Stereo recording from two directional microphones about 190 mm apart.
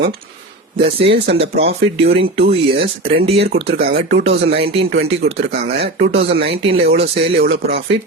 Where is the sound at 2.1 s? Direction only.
30° right (ahead or behind).